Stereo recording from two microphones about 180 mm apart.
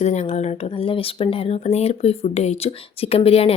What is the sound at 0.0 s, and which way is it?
Speech, 40° left (ahead or behind).